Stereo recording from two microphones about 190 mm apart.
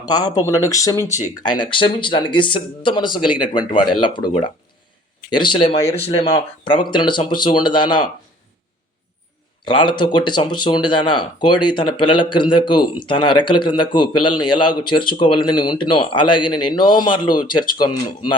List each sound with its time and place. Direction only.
0.0 s a man's voice: 20° left (ahead or behind)
5.6 s a man's voice: 35° left (ahead or behind)
9.6 s a man's voice: 25° left (ahead or behind)